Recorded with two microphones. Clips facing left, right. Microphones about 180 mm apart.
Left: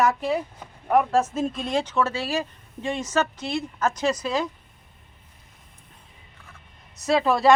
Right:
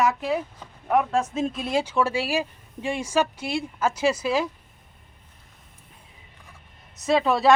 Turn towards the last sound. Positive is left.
turn(degrees=0)  # may be behind; listen again after turning